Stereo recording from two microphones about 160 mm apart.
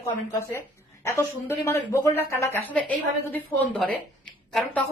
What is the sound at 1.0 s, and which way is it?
Speech, 15° left (ahead or behind).